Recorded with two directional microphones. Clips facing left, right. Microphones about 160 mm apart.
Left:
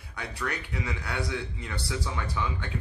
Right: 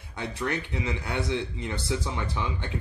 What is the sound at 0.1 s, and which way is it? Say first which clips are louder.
A man's voice: right 4 dB; 25° right (ahead or behind).